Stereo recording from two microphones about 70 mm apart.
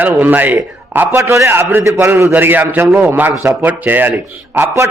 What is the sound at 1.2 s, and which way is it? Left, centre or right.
Speech, right.